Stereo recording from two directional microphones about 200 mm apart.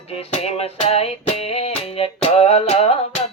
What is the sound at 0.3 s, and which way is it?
Music, 30° left (ahead or behind).